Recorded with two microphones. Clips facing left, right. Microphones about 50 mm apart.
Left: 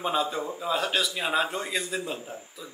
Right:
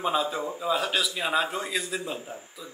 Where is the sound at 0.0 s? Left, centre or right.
Centre.